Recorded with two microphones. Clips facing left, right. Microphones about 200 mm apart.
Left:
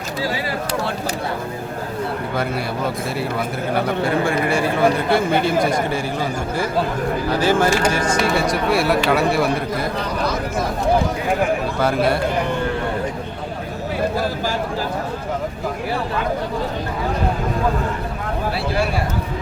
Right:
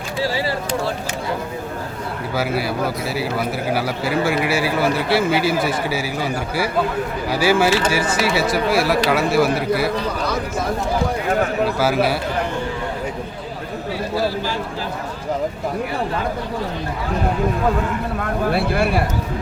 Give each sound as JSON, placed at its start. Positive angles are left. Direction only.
{"t": 2.3, "sound": "a man's voice", "side_deg": -5}
{"t": 7.3, "sound": "a man's voice", "side_deg": -10}
{"t": 11.8, "sound": "a man's voice", "side_deg": -5}
{"t": 18.5, "sound": "speech", "side_deg": -55}